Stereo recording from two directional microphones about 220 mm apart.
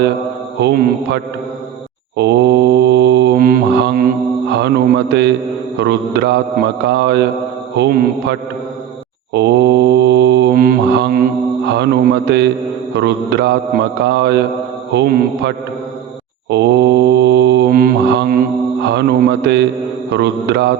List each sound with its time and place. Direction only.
0.6 s mantra: 45° right (ahead or behind)
11.7 s a man's voice: 50° right (ahead or behind)
12.9 s mantra: 50° right (ahead or behind)